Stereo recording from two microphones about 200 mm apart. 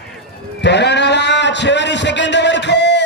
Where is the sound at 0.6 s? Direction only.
60° left (ahead or behind).